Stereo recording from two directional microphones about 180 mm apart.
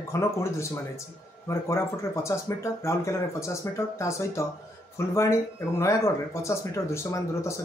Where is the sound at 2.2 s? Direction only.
15° left (ahead or behind).